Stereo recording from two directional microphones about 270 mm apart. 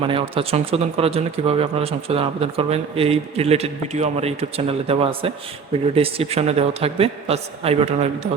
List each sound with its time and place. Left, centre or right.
0.0 s speech: centre